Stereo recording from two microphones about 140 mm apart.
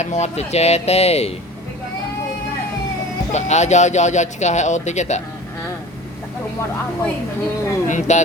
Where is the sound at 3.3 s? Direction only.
55° left (ahead or behind).